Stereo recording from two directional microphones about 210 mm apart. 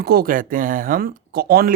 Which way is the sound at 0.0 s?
45° right (ahead or behind).